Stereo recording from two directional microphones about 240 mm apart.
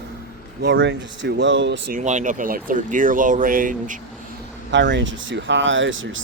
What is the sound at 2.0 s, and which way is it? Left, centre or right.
Speech, right.